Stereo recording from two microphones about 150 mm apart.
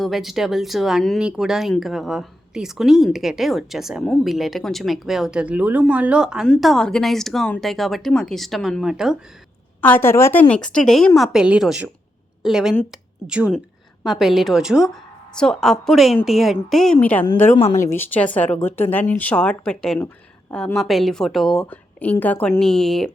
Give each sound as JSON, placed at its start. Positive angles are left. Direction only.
{"t": 0.0, "sound": "speech", "side_deg": 0}
{"t": 9.8, "sound": "speech", "side_deg": 15}
{"t": 10.5, "sound": "a woman's voice", "side_deg": 5}
{"t": 17.5, "sound": "speech", "side_deg": 55}
{"t": 17.8, "sound": "speech", "side_deg": 10}